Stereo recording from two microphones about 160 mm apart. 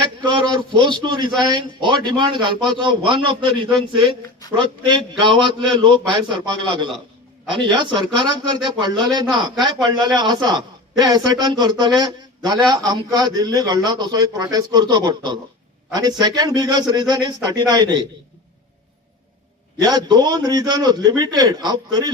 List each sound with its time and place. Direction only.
0.3 s a man's voice: 30° right (ahead or behind)
2.6 s a man's voice: centre (ahead or behind)
2.8 s a man's voice: 30° right (ahead or behind)
19.8 s a man's voice: 25° right (ahead or behind)